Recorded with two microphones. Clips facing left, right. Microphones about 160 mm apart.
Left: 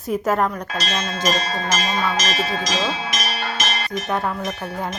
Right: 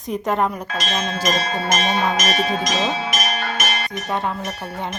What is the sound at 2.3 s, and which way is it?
Speech, 20° right (ahead or behind).